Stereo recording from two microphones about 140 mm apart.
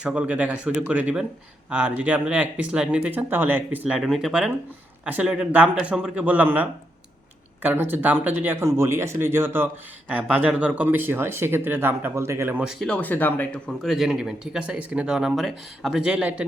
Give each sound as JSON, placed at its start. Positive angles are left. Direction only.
{"t": 0.0, "sound": "speech", "side_deg": -10}
{"t": 12.6, "sound": "speech", "side_deg": 5}
{"t": 13.7, "sound": "speech", "side_deg": 0}